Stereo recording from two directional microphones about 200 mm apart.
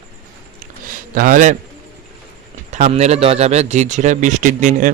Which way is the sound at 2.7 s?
40° right (ahead or behind).